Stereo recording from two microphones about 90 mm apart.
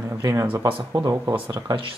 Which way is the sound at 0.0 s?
30° right (ahead or behind).